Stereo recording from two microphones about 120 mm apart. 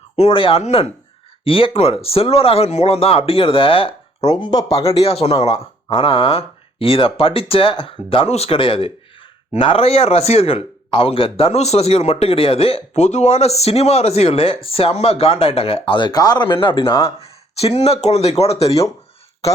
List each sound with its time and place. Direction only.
0.2 s speech: 50° left (ahead or behind)
4.4 s speech: 30° left (ahead or behind)
4.9 s speech: 55° left (ahead or behind)
5.9 s speech: 50° left (ahead or behind)
17.2 s speech: 60° left (ahead or behind)